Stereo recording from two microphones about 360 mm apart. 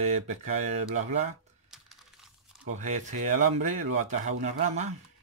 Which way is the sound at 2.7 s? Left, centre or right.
Centre.